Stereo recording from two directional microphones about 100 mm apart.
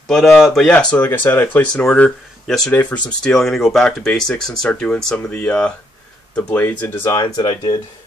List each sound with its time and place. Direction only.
0.1 s speech: centre (ahead or behind)
0.7 s speech: 15° left (ahead or behind)
3.3 s speech: centre (ahead or behind); by 7.1 s 20° left (ahead or behind)
7.1 s speech: 35° left (ahead or behind)